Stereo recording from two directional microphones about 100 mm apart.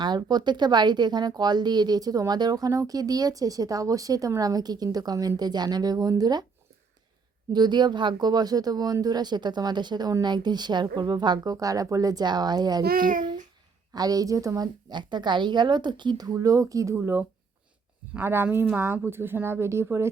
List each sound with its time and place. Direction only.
0.0 s speech: 45° right (ahead or behind)
7.5 s speech: 45° right (ahead or behind)
13.9 s speech: 40° right (ahead or behind)
17.0 s speech: 20° right (ahead or behind)